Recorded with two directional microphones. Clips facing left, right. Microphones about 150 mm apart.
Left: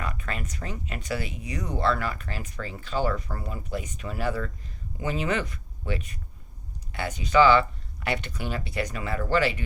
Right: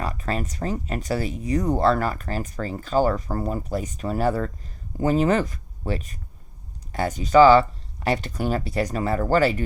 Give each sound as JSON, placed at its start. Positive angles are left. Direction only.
{"t": 0.0, "sound": "speech", "side_deg": -35}